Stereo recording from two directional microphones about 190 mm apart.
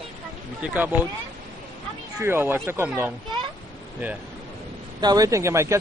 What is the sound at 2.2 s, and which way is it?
Speech, 10° right (ahead or behind).